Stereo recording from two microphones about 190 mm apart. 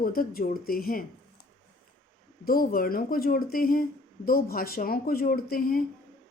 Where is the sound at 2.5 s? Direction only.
50° left (ahead or behind).